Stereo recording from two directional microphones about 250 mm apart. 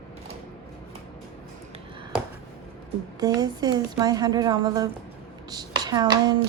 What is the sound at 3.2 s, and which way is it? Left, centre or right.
A woman's voice, centre.